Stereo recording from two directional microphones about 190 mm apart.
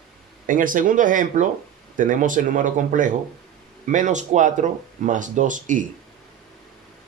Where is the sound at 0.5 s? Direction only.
45° right (ahead or behind).